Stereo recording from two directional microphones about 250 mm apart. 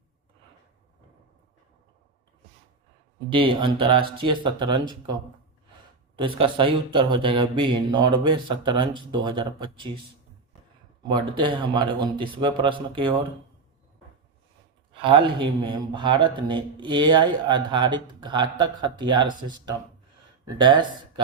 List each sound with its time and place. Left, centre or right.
3.3 s speech: centre
6.1 s speech: right
11.1 s speech: centre
15.0 s speech: centre